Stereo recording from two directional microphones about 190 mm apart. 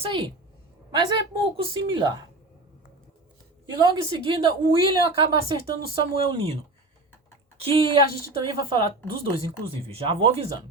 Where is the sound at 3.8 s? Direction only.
25° right (ahead or behind).